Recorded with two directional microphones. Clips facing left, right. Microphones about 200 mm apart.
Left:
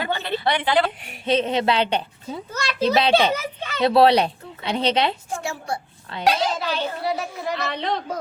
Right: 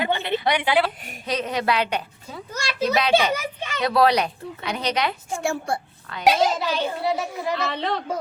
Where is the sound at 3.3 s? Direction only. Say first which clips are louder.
Even; 15° right (ahead or behind).